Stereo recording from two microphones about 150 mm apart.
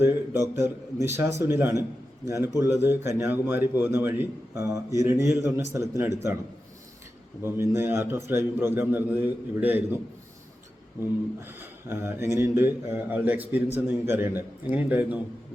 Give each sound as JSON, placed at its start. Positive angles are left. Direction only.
{"t": 0.0, "sound": "a man's voice", "side_deg": -15}
{"t": 7.4, "sound": "a man's voice", "side_deg": -15}
{"t": 11.3, "sound": "a man's voice", "side_deg": -15}